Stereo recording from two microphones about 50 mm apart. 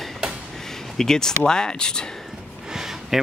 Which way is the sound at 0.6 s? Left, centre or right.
Centre.